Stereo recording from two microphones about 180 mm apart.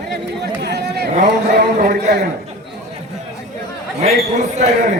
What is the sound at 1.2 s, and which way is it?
Speech, 65° right (ahead or behind).